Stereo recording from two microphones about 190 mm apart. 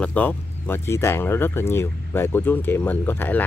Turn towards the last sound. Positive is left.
turn(degrees=10)  # may be behind; listen again after turning